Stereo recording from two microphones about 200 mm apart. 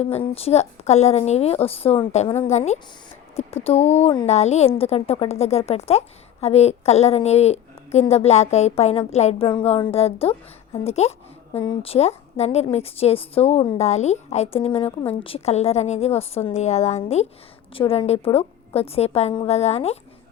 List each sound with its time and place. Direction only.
0.3 s a woman's voice: 30° left (ahead or behind)